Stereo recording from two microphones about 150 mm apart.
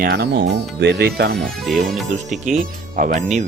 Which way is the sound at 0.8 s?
90° right.